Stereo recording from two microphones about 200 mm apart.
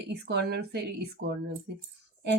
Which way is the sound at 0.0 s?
55° right (ahead or behind).